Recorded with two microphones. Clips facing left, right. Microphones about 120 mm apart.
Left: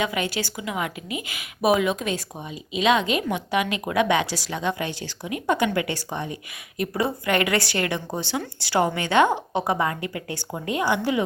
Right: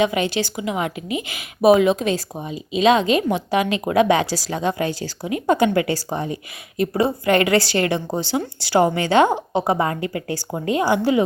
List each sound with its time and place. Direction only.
0.0 s a woman's voice: 25° right (ahead or behind)